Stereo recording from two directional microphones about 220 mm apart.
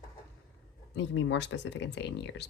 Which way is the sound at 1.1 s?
55° left (ahead or behind).